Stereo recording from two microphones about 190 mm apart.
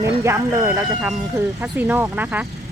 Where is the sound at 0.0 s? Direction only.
15° right (ahead or behind).